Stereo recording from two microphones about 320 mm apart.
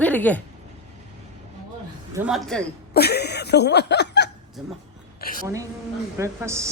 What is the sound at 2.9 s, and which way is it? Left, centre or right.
Speech, left.